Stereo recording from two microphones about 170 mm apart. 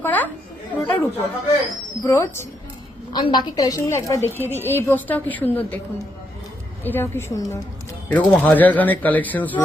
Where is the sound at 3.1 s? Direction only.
25° left (ahead or behind); by 5.8 s 10° left (ahead or behind).